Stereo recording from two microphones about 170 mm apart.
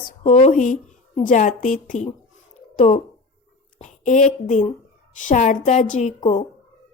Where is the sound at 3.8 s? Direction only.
45° left (ahead or behind).